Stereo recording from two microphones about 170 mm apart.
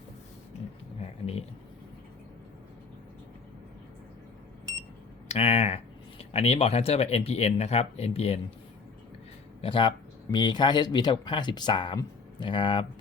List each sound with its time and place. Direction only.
5.3 s speech: 40° left (ahead or behind)
9.6 s speech: 30° left (ahead or behind)